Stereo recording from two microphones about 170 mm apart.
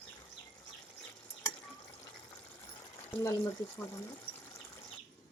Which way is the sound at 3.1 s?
15° left (ahead or behind).